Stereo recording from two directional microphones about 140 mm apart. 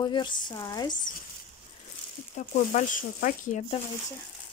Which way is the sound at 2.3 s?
65° left (ahead or behind).